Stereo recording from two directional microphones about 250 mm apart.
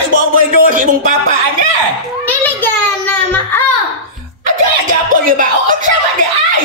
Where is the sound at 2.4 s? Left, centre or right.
Centre.